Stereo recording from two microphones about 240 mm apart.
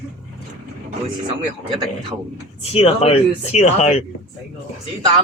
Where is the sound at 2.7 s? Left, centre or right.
Left.